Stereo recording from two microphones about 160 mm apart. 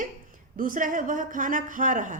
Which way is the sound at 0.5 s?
60° right (ahead or behind).